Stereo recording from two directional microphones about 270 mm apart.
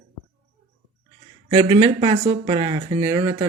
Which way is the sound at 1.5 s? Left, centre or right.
Centre.